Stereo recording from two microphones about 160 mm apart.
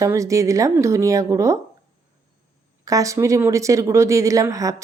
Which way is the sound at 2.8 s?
20° right (ahead or behind).